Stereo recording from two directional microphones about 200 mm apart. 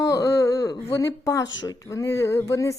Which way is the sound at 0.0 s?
15° left (ahead or behind).